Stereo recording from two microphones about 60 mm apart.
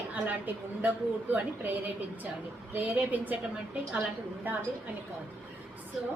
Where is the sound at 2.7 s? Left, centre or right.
Right.